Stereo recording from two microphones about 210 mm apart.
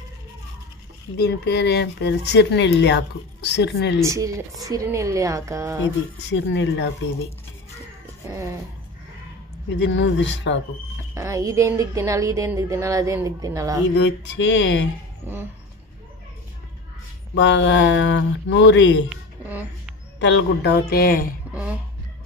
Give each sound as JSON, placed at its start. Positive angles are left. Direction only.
{"t": 1.1, "sound": "speech", "side_deg": 50}
{"t": 4.0, "sound": "a woman's voice", "side_deg": -15}
{"t": 6.2, "sound": "speech", "side_deg": 60}
{"t": 9.8, "sound": "speech", "side_deg": 60}
{"t": 11.1, "sound": "a woman's voice", "side_deg": -15}
{"t": 13.9, "sound": "speech", "side_deg": 55}
{"t": 17.3, "sound": "speech", "side_deg": 60}
{"t": 19.0, "sound": "a sound", "side_deg": -5}
{"t": 20.2, "sound": "speech", "side_deg": 60}